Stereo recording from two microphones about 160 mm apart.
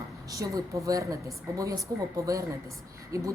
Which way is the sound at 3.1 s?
20° right (ahead or behind).